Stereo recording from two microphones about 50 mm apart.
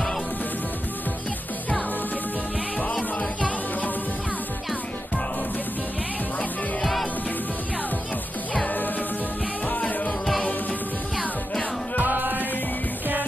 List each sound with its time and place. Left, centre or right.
2.8 s music: left
6.8 s music: centre
8.6 s music: left
12.0 s music: right